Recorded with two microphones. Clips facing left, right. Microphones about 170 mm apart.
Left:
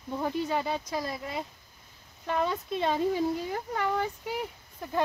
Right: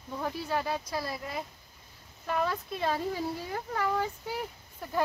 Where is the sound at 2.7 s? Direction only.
25° left (ahead or behind).